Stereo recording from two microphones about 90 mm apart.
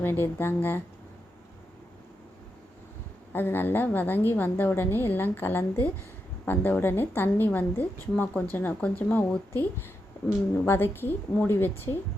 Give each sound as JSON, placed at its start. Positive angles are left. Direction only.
{"t": 0.0, "sound": "a woman's voice", "side_deg": 25}
{"t": 3.3, "sound": "a woman's voice", "side_deg": 25}